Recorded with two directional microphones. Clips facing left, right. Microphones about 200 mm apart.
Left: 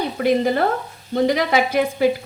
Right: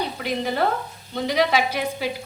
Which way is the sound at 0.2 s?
55° left (ahead or behind).